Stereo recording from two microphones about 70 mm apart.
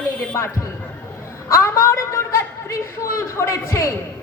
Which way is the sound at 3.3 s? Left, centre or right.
Left.